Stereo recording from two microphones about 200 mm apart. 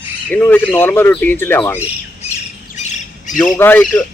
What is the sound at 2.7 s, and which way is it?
Squawk, 35° left (ahead or behind).